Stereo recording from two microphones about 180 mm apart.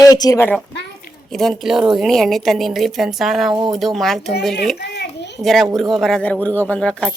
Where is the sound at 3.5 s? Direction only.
20° right (ahead or behind).